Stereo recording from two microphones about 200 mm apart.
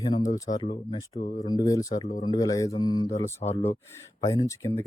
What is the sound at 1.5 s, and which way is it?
Speech, 20° left (ahead or behind).